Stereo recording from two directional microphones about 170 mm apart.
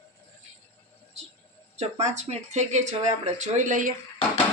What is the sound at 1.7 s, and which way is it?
Speech, 40° right (ahead or behind).